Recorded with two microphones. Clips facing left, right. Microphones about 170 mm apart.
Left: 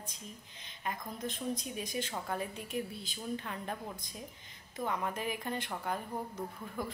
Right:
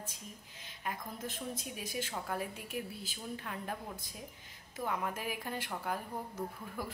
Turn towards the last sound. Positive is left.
turn(degrees=-5)  # may be behind; listen again after turning